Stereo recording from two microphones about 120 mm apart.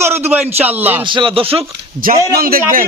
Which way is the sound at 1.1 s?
45° right (ahead or behind).